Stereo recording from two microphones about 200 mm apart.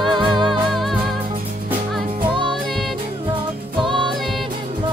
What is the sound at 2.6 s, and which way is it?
Music, centre (ahead or behind).